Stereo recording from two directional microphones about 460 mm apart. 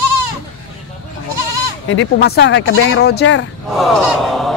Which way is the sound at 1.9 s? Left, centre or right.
Left.